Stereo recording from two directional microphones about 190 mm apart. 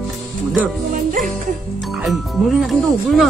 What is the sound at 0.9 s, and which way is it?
Music, 45° right (ahead or behind).